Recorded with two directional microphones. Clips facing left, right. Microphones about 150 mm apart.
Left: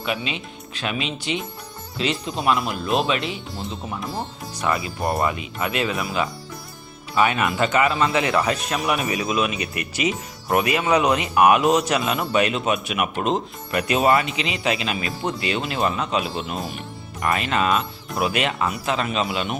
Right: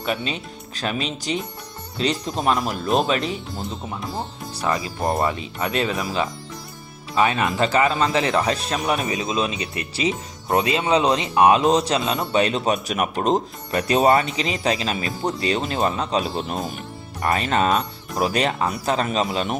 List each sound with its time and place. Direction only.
0.0 s speech: 40° right (ahead or behind)
3.6 s speech: centre (ahead or behind)
4.5 s speech: 35° right (ahead or behind)